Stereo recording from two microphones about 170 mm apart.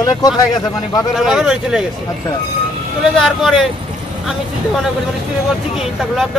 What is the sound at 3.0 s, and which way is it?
Speech, centre (ahead or behind).